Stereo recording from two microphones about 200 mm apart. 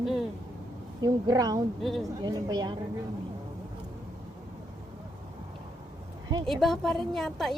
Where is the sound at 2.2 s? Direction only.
20° right (ahead or behind).